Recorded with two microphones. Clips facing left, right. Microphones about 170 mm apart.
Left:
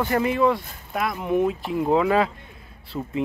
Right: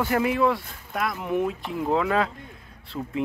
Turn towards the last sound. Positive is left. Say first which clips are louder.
# left 2 dB
turn(degrees=10)  # may be behind; listen again after turning